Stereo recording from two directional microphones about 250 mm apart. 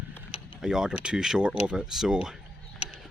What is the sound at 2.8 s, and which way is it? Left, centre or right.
Mechanisms, left.